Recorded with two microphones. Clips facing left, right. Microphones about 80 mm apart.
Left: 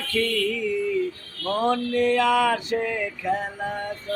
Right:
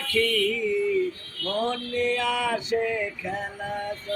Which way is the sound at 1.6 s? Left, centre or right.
Left.